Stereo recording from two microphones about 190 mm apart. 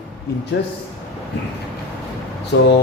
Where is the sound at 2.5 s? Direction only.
65° left (ahead or behind).